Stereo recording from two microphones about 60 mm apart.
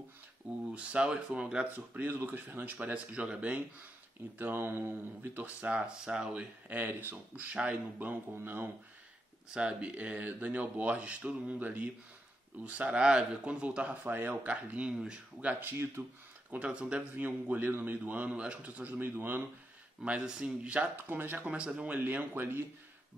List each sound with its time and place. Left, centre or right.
0.7 s speech: right
2.0 s speech: right
4.4 s speech: right; by 6.4 s centre
6.7 s speech: right
8.4 s speech: right
9.5 s speech: centre
16.0 s speech: right
16.4 s speech: right
17.2 s speech: right
20.0 s speech: centre
20.9 s speech: right
21.5 s speech: centre
21.8 s speech: right